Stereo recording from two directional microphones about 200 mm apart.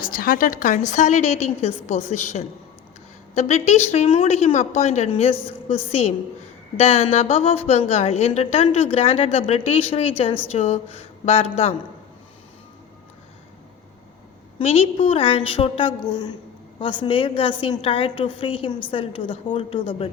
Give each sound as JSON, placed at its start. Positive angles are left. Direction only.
{"t": 0.0, "sound": "a woman's voice", "side_deg": 45}
{"t": 14.6, "sound": "a woman's voice", "side_deg": 30}